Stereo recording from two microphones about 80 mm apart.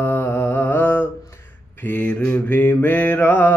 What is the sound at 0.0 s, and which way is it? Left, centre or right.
Mantra, left.